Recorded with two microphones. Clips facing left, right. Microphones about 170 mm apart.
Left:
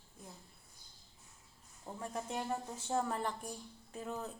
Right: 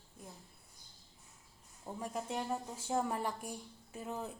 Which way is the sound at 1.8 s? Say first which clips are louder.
Right 1 dB; 10° right (ahead or behind).